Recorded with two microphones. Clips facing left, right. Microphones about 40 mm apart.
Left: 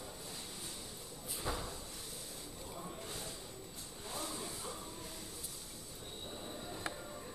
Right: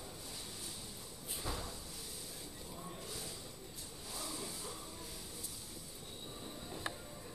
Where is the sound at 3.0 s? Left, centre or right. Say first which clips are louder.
Left 1 dB; left.